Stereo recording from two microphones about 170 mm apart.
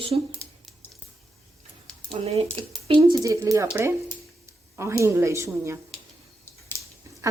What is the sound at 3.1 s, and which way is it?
Speech, 20° right (ahead or behind).